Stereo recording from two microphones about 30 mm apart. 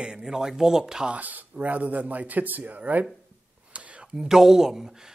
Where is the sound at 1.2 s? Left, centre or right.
Right.